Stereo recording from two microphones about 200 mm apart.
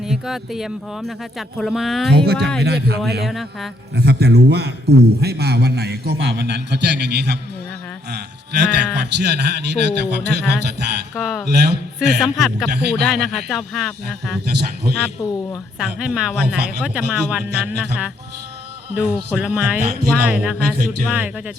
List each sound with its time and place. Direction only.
0.0 s speech: centre (ahead or behind)
2.1 s a man's voice: 55° right (ahead or behind)
3.2 s speech: centre (ahead or behind)
3.9 s a man's voice: 55° right (ahead or behind)
11.2 s speech: centre (ahead or behind)
11.4 s a man's voice: 55° right (ahead or behind)
12.2 s speech: centre (ahead or behind)
14.4 s a man's voice: 50° right (ahead or behind)
15.0 s speech: 15° left (ahead or behind)
15.8 s speech: 5° right (ahead or behind)